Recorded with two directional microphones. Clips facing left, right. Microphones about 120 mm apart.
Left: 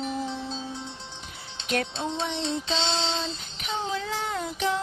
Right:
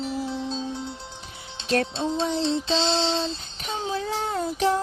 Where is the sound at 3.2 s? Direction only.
30° right (ahead or behind).